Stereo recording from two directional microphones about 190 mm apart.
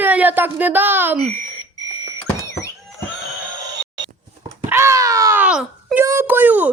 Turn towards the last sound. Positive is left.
turn(degrees=-10)  # may be behind; listen again after turning